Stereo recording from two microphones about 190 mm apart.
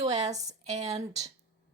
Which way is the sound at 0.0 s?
35° right (ahead or behind).